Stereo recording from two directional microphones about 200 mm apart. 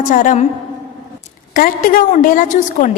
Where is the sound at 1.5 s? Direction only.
40° left (ahead or behind).